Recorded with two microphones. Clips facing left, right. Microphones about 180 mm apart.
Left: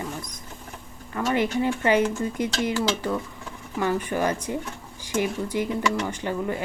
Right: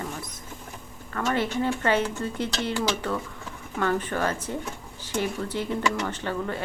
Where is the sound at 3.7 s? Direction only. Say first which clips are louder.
Left 1 dB; 10° left (ahead or behind).